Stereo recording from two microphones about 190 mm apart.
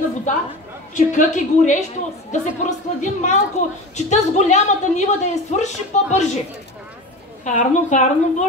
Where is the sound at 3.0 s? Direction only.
40° left (ahead or behind).